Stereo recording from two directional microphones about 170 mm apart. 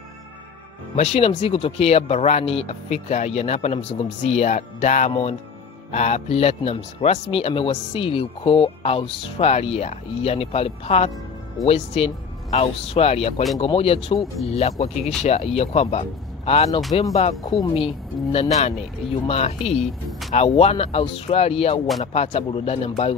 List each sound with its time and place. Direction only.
0.9 s speech: 40° left (ahead or behind)
17.4 s speech: 25° left (ahead or behind)
17.7 s speech: 35° left (ahead or behind)